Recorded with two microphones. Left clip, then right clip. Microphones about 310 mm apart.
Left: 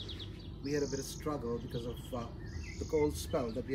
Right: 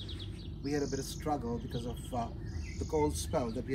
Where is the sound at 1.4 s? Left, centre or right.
Right.